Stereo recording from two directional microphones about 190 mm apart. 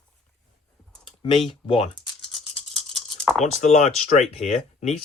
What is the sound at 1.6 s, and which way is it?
Speech, 30° left (ahead or behind).